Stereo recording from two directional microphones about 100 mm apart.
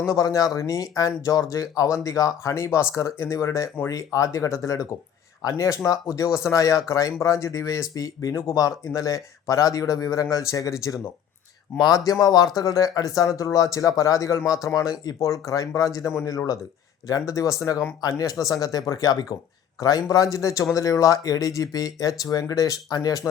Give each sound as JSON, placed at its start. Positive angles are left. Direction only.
{"t": 0.1, "sound": "speech", "side_deg": 35}